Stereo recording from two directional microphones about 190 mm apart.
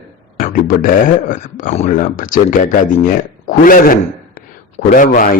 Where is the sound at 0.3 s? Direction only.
45° left (ahead or behind).